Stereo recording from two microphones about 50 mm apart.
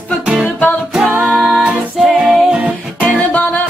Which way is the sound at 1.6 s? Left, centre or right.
Right.